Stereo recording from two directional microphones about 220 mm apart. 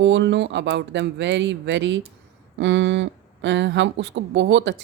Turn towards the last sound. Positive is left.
turn(degrees=-55)  # may be behind; listen again after turning